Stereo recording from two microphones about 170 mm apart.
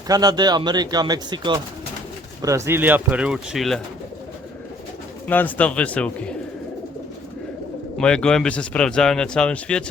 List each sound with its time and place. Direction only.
0.1 s speech: 25° right (ahead or behind); by 3.8 s centre (ahead or behind)
5.3 s speech: 10° left (ahead or behind)
7.9 s speech: 5° left (ahead or behind)